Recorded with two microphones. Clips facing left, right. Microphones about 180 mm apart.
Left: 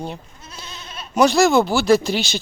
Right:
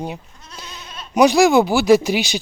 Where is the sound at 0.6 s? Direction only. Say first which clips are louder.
Right 1 dB; 15° right (ahead or behind).